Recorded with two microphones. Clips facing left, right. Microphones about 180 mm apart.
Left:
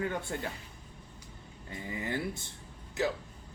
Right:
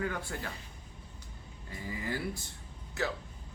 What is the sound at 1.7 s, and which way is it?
Speech, 20° left (ahead or behind).